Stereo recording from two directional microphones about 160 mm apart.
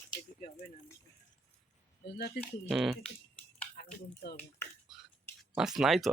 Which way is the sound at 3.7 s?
85° left.